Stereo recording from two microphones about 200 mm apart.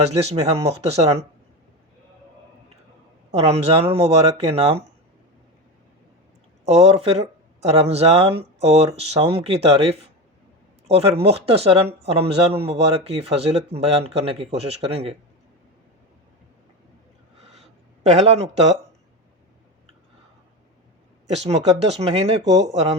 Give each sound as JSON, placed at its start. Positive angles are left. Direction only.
{"t": 0.0, "sound": "speech", "side_deg": -30}
{"t": 3.3, "sound": "speech", "side_deg": -30}
{"t": 6.7, "sound": "speech", "side_deg": -30}
{"t": 18.0, "sound": "speech", "side_deg": -35}
{"t": 21.2, "sound": "speech", "side_deg": -30}